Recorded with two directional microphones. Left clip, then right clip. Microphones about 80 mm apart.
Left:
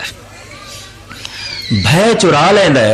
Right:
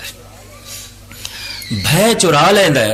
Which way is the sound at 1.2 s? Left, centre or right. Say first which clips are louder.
Left 3 dB; right.